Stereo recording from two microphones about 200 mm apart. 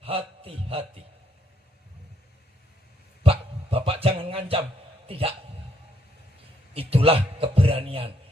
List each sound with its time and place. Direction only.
0.0 s a man's voice: 30° right (ahead or behind)
3.2 s dog: 30° right (ahead or behind)
5.0 s a man's voice: 30° right (ahead or behind)
6.7 s a man's voice: 30° right (ahead or behind)